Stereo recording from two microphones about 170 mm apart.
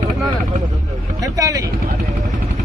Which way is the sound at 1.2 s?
20° right (ahead or behind).